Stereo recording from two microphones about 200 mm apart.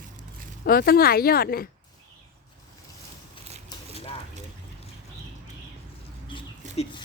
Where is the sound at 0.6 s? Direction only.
50° left (ahead or behind).